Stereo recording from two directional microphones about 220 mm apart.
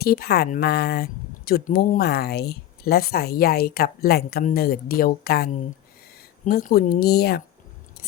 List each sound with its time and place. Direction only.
0.0 s a woman's voice: 45° left (ahead or behind)